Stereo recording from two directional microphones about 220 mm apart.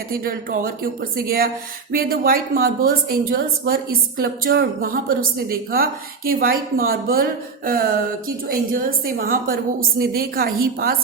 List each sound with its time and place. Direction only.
0.1 s a woman's voice: 40° right (ahead or behind)